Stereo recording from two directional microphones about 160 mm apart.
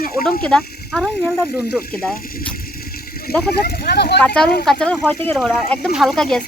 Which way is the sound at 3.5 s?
85° left.